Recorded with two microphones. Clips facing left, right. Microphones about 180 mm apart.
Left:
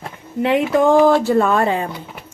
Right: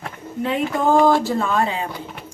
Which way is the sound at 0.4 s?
75° left (ahead or behind).